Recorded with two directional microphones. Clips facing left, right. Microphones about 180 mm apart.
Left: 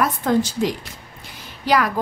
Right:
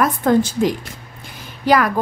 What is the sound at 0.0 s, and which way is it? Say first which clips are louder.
A woman's voice: right 4 dB; 50° right (ahead or behind).